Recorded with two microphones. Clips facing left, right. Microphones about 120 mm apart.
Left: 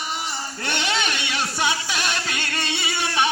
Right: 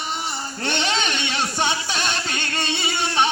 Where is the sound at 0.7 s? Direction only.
25° right (ahead or behind).